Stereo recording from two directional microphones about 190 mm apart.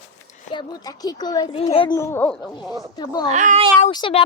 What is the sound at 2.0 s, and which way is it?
Speech, 10° left (ahead or behind).